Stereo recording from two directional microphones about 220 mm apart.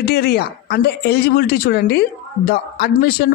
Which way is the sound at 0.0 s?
50° left (ahead or behind).